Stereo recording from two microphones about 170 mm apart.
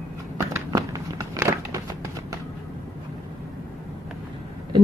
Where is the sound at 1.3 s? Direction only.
15° right (ahead or behind).